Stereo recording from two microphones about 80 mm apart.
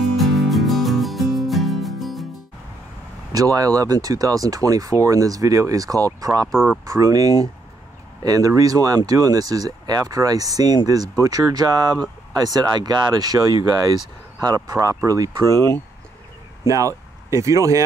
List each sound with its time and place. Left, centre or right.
0.0 s music: centre
3.3 s speech: right
6.5 s speech: centre
6.9 s speech: right
16.6 s speech: right